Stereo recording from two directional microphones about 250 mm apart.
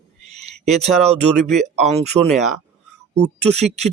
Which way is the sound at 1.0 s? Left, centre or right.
Right.